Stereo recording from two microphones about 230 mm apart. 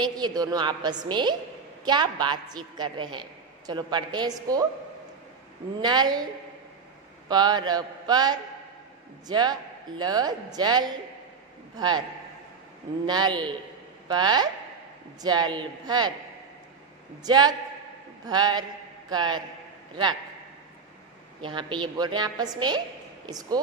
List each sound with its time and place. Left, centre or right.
0.0 s a woman's voice: centre
5.8 s a woman's voice: centre
7.2 s a man's voice: centre
13.0 s a woman's voice: centre
17.2 s speech: centre
21.4 s a woman's voice: right